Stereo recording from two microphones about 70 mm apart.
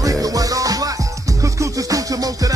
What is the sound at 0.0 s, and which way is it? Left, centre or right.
Music, right.